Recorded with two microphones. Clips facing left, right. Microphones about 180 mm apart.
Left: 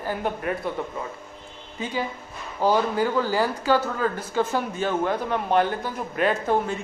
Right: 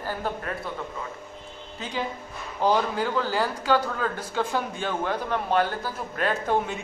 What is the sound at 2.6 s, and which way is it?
A man's voice, 10° left (ahead or behind).